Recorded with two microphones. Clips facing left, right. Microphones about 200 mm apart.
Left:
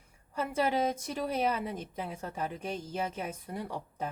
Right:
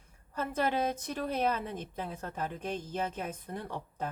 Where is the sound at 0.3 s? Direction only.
10° left (ahead or behind).